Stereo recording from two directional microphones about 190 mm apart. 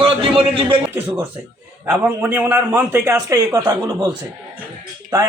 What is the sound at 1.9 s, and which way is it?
A man's voice, 10° right (ahead or behind).